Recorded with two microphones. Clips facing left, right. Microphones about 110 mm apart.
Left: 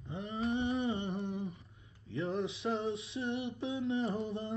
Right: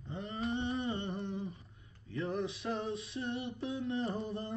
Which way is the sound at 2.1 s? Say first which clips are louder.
Left 1 dB; 30° left (ahead or behind).